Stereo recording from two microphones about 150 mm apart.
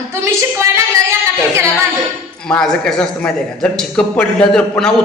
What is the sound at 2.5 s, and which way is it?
A man's voice, 5° left (ahead or behind).